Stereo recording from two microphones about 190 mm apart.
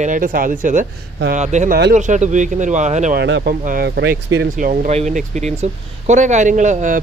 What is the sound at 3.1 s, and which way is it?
Speech, 60° right (ahead or behind).